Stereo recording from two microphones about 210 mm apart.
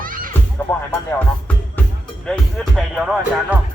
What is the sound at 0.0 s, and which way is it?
Music, 40° right (ahead or behind).